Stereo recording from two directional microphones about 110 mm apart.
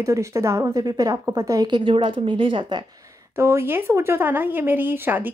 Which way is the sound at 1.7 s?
45° right (ahead or behind).